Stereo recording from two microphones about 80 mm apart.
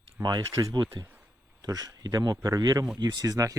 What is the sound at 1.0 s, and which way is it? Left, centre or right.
Speech, right.